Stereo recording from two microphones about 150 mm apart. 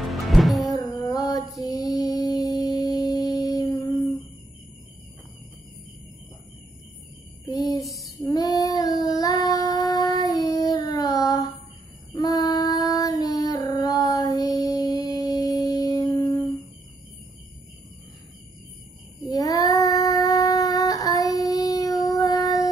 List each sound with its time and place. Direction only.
0.0 s music: centre (ahead or behind)
0.7 s music: 25° left (ahead or behind)
7.4 s a sound: 25° left (ahead or behind)
8.3 s child singing: 25° left (ahead or behind)
19.2 s child singing: 25° left (ahead or behind)